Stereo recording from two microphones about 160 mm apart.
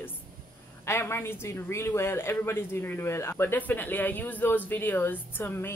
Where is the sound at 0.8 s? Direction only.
15° left (ahead or behind).